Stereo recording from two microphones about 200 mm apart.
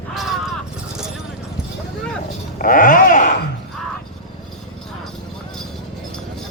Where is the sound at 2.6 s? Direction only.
45° left (ahead or behind).